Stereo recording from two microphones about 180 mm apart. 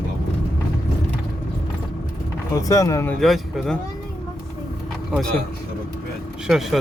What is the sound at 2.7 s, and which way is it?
Speech, 15° left (ahead or behind).